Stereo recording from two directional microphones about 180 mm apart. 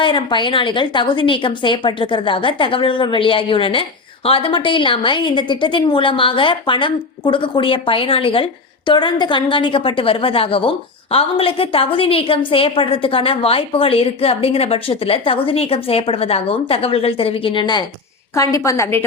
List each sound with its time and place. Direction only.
0.0 s a woman's voice: 25° left (ahead or behind)